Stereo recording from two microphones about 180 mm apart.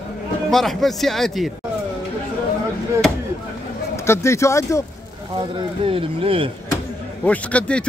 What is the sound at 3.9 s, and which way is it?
Speech, 15° left (ahead or behind).